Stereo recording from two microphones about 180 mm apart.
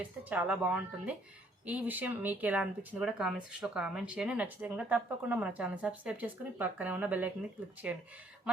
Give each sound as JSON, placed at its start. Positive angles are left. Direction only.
{"t": 0.0, "sound": "speech", "side_deg": -10}